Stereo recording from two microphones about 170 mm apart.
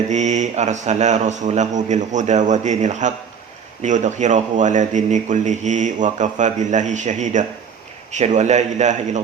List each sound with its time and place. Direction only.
0.1 s speech: 45° right (ahead or behind)